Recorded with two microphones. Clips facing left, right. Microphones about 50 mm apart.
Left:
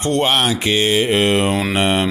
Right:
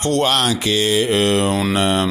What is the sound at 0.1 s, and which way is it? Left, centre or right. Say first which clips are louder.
A man's voice: left 1 dB; left.